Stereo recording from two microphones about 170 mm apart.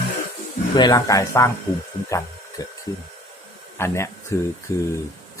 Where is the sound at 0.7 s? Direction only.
25° left (ahead or behind).